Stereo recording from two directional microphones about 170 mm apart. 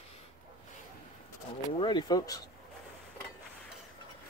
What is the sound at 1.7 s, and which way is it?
Speech, 25° left (ahead or behind).